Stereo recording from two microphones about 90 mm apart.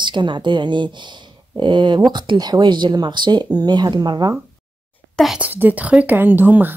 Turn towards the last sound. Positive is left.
turn(degrees=-20)  # may be behind; listen again after turning